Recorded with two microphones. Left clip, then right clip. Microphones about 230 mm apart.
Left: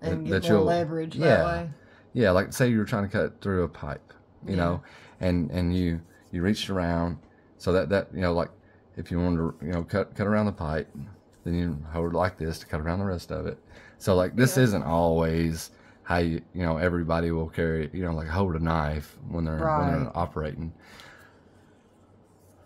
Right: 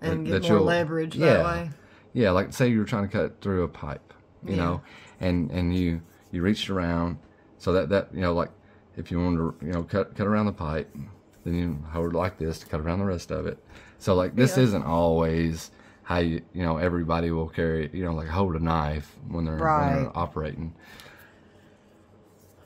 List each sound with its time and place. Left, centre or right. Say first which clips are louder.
0.3 s speech: right 1 dB; centre
0.7 s speech: right 1 dB; right
2.1 s speech: left 1 dB; centre
14.0 s speech: even; centre